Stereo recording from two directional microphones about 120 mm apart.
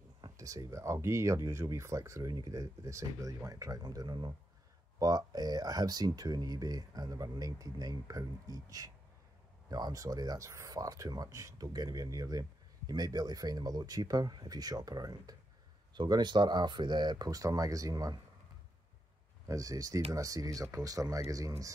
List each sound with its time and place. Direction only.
0.2 s speech: 25° right (ahead or behind)
19.4 s speech: 30° right (ahead or behind)